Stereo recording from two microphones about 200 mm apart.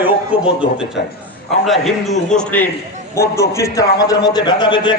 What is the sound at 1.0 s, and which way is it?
Speech, 60° left (ahead or behind).